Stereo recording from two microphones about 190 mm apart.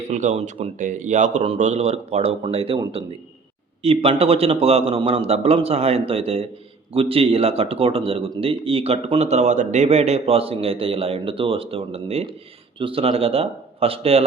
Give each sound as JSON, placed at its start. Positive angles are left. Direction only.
{"t": 0.1, "sound": "speech", "side_deg": -40}